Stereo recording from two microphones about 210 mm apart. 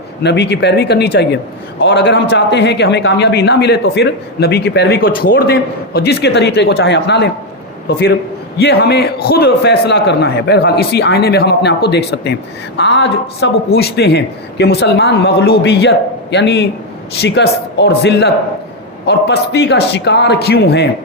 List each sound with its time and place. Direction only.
0.2 s a man's voice: 55° left (ahead or behind)